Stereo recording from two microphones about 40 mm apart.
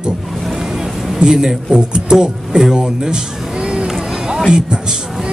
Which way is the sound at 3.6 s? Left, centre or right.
Right.